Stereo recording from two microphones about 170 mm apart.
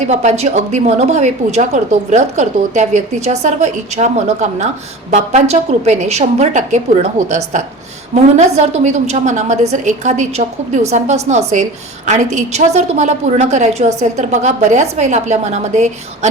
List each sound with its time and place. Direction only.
0.1 s a woman's voice: 40° right (ahead or behind)